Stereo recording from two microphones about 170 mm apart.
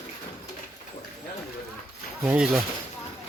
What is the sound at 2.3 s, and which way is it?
Speech, 5° right (ahead or behind).